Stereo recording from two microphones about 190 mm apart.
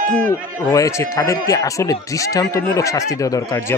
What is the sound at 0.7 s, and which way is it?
Speech, 15° left (ahead or behind).